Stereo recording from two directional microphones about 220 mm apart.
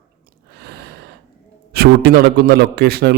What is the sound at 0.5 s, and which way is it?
Gasp, 45° right (ahead or behind).